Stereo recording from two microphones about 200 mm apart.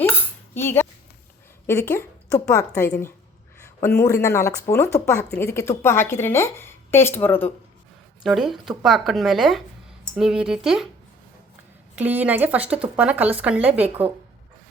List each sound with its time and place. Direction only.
0.5 s a woman's voice: 10° left (ahead or behind)
8.2 s speech: centre (ahead or behind)
11.9 s speech: 10° right (ahead or behind)